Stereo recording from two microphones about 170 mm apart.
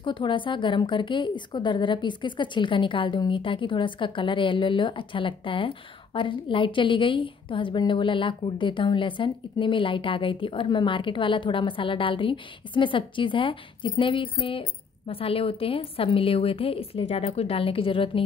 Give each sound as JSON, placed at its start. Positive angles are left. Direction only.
{"t": 0.0, "sound": "a woman's voice", "side_deg": 30}